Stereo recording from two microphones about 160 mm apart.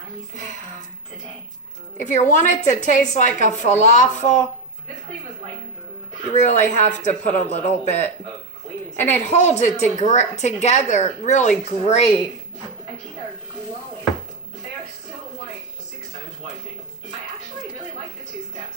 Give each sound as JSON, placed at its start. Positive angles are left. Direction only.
{"t": 2.0, "sound": "a woman's voice", "side_deg": 50}
{"t": 6.3, "sound": "a woman's voice", "side_deg": 45}